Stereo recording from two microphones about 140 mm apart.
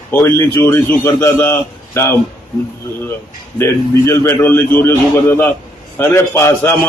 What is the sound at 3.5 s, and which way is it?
A man's voice, 20° left (ahead or behind).